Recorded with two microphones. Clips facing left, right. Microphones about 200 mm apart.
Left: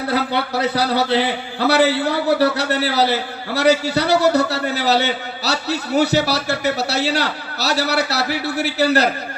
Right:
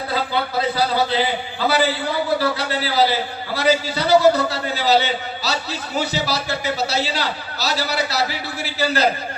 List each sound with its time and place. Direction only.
0.1 s a man's voice: 70° left (ahead or behind)